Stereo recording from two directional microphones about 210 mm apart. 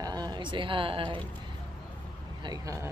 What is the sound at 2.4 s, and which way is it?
Speech, 15° right (ahead or behind).